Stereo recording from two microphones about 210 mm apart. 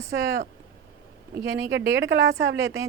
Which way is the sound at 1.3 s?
55° right (ahead or behind).